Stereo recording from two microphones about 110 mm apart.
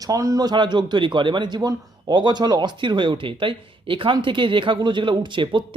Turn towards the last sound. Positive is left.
turn(degrees=-50)  # may be behind; listen again after turning